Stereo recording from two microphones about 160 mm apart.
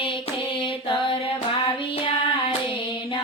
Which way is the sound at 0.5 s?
30° left (ahead or behind).